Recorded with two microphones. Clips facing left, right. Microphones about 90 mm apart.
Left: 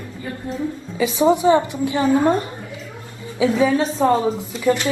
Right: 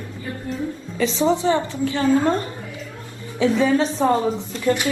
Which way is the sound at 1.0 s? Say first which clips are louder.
Left 3 dB; 15° left (ahead or behind).